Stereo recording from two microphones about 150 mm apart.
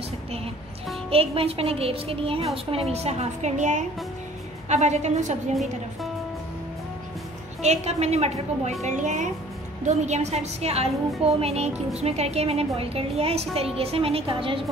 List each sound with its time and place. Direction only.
1.1 s a woman's voice: 40° right (ahead or behind)
7.6 s a woman's voice: 45° right (ahead or behind)